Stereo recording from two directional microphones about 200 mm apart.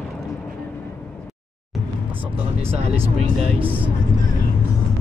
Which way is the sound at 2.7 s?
30° right (ahead or behind).